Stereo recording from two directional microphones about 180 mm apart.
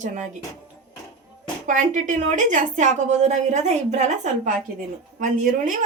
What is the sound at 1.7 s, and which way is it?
A woman's voice, 45° right (ahead or behind).